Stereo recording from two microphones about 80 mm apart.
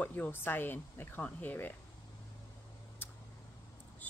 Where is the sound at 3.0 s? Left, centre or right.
Left.